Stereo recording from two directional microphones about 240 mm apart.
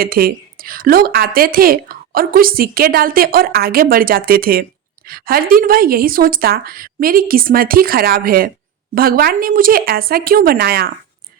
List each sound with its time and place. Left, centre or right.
0.0 s speech: right